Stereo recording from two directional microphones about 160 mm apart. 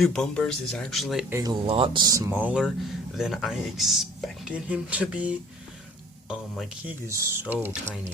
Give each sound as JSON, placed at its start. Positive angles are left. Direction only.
{"t": 0.0, "sound": "speech", "side_deg": 5}
{"t": 1.3, "sound": "speech", "side_deg": -20}
{"t": 1.6, "sound": "speech", "side_deg": -35}